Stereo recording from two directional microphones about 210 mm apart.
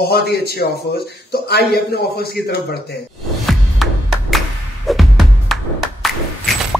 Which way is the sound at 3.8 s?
Centre (ahead or behind).